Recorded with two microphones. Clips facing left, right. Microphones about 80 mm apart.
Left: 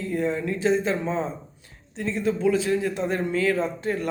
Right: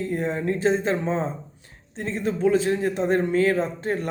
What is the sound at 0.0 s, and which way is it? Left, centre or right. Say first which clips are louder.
Speech: even; right.